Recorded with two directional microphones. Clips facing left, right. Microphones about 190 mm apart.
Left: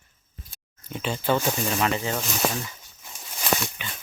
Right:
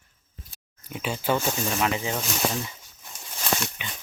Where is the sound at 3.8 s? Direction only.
15° right (ahead or behind).